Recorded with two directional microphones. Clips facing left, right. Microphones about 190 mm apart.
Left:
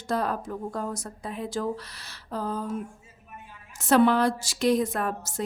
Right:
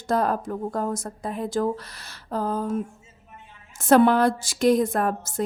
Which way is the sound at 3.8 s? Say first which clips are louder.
Right 3 dB; 50° right (ahead or behind).